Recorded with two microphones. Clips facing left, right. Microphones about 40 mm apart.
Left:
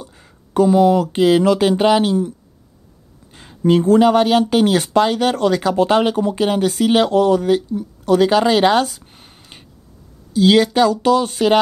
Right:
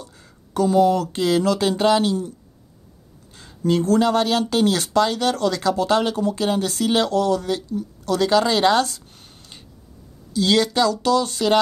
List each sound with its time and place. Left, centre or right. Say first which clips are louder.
0.0 s speech: left 3 dB; left
3.3 s speech: left 5 dB; left